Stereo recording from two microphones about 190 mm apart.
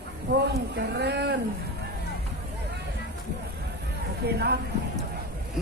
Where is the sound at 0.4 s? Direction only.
60° right (ahead or behind).